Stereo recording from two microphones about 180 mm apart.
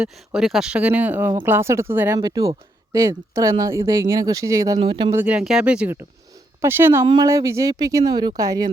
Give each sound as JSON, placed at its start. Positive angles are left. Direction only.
{"t": 0.0, "sound": "speech", "side_deg": 0}
{"t": 5.1, "sound": "speech", "side_deg": -10}
{"t": 7.0, "sound": "speech", "side_deg": -25}